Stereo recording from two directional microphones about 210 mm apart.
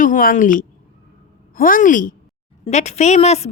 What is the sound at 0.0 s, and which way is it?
A woman's voice, 40° left (ahead or behind).